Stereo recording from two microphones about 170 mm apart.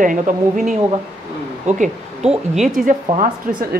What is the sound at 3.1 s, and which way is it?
Speech, 50° right (ahead or behind).